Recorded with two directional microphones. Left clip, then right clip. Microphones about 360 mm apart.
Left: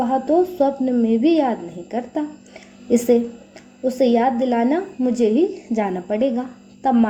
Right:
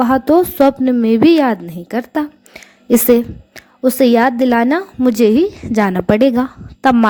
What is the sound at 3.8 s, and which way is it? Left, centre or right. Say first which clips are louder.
A woman's voice: right 6 dB; right.